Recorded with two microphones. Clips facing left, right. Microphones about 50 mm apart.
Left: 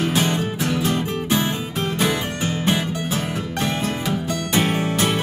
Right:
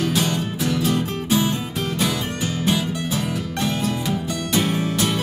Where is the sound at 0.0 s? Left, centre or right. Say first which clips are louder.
Left 1 dB; left.